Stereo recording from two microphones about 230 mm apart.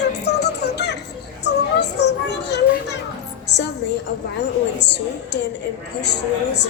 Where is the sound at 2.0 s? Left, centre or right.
Left.